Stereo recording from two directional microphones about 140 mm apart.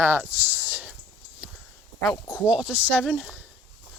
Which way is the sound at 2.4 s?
5° right (ahead or behind).